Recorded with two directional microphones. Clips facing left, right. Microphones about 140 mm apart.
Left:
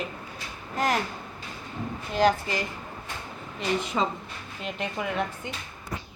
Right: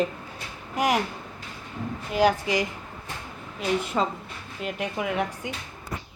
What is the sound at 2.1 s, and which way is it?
Speech, 10° right (ahead or behind).